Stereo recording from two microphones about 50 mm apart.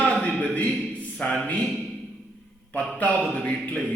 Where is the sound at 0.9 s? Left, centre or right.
Left.